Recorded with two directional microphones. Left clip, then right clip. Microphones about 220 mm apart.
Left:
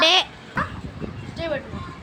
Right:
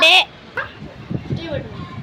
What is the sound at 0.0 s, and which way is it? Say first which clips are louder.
Dog: right 5 dB; 10° left (ahead or behind).